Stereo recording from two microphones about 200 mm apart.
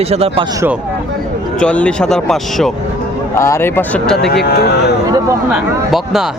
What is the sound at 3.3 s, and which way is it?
Speech, 15° left (ahead or behind).